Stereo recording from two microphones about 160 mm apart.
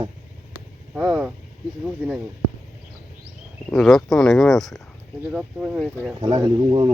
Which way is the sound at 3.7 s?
Centre (ahead or behind).